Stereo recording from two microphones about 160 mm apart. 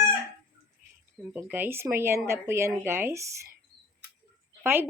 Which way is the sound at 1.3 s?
10° right (ahead or behind).